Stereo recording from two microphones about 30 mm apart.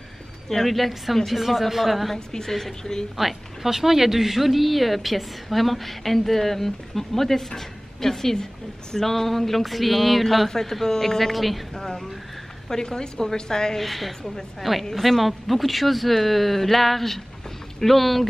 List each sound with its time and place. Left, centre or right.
0.7 s a woman's voice: centre
2.1 s a woman's voice: centre
3.2 s a woman's voice: centre
10.5 s a woman's voice: centre
11.7 s a woman's voice: centre
13.7 s a woman's voice: centre